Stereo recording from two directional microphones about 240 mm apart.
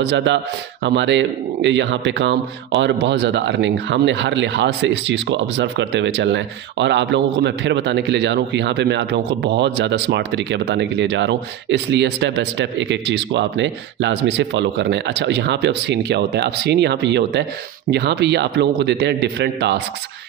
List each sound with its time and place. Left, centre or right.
0.0 s speech: right